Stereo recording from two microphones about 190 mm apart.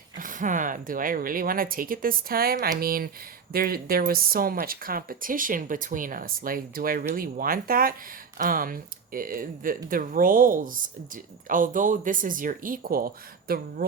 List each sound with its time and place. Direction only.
0.2 s speech: 45° right (ahead or behind)